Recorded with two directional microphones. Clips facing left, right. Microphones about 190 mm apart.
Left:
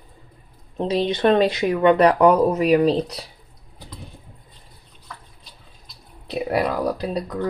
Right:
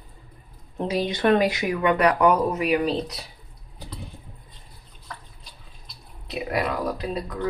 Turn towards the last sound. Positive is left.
turn(degrees=30)  # may be behind; listen again after turning